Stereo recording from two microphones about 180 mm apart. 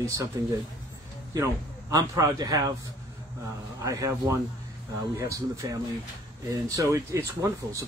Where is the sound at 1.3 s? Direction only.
20° right (ahead or behind).